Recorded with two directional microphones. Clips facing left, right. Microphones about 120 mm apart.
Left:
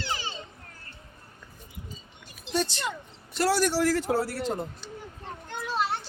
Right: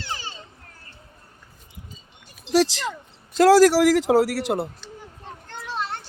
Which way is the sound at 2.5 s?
90° right.